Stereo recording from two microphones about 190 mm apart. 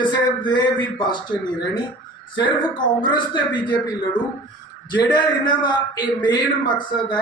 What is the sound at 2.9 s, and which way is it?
A man's voice, 25° left (ahead or behind).